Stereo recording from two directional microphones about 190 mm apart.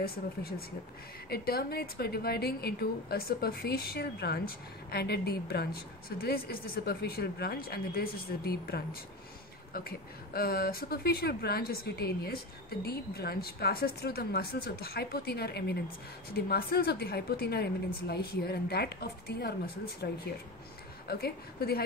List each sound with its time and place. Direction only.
0.0 s a woman's voice: 50° left (ahead or behind)
21.1 s a woman's voice: 55° left (ahead or behind)